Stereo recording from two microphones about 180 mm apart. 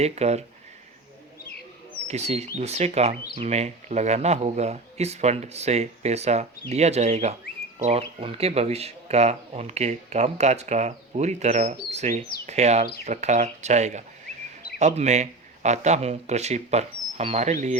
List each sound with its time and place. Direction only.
0.0 s speech: 35° right (ahead or behind)
2.0 s speech: 35° right (ahead or behind)